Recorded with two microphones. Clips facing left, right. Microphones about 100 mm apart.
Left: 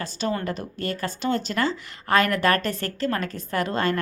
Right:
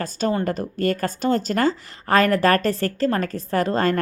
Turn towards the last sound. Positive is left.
turn(degrees=-40)  # may be behind; listen again after turning